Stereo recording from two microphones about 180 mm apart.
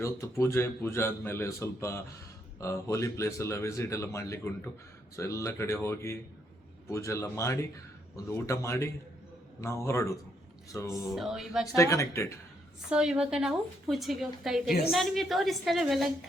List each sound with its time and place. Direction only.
0.0 s speech: 15° left (ahead or behind)
11.1 s a woman's voice: centre (ahead or behind)
11.7 s speech: 15° left (ahead or behind)
12.9 s a woman's voice: 5° right (ahead or behind)